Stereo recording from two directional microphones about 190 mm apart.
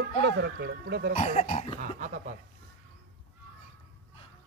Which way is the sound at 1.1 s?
35° left (ahead or behind).